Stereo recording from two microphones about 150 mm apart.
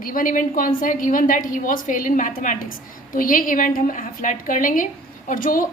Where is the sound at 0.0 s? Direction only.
65° left (ahead or behind).